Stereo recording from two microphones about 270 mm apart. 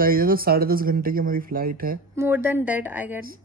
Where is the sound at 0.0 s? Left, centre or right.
Right.